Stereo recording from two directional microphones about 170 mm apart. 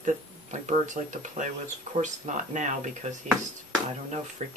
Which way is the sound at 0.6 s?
45° right (ahead or behind).